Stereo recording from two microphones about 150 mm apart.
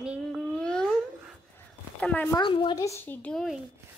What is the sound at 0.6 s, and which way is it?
Babbling, 5° left (ahead or behind).